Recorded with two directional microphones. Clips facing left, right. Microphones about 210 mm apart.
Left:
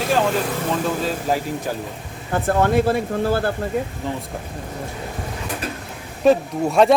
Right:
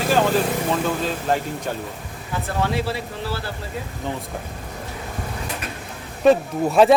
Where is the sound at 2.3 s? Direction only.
50° left (ahead or behind).